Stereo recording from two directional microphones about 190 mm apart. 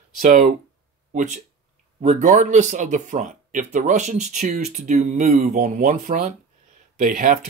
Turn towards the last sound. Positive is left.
turn(degrees=-45)  # may be behind; listen again after turning